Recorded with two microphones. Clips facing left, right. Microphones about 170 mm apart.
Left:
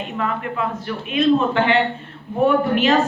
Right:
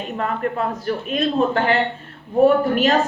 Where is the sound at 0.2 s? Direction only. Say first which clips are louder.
Right 1 dB; 40° right (ahead or behind).